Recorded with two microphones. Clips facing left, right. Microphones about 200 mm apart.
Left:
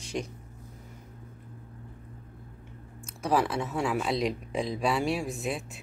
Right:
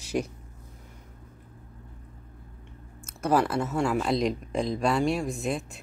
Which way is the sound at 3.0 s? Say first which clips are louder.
Right 2 dB; centre (ahead or behind).